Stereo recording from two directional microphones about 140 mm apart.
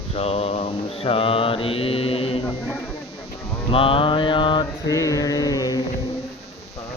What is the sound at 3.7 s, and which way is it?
Mantra, 40° left (ahead or behind).